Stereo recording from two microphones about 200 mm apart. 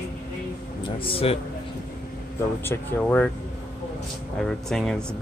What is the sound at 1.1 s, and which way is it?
Speech, 30° left (ahead or behind).